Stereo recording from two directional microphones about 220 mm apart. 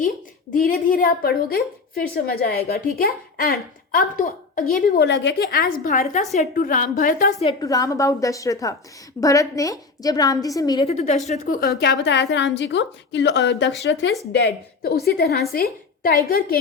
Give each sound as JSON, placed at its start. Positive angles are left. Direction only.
{"t": 0.5, "sound": "a woman's voice", "side_deg": 40}
{"t": 7.6, "sound": "a woman's voice", "side_deg": 15}
{"t": 11.3, "sound": "a woman's voice", "side_deg": 40}